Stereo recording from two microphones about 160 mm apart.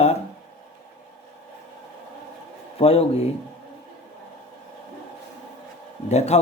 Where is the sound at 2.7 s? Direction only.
40° left (ahead or behind).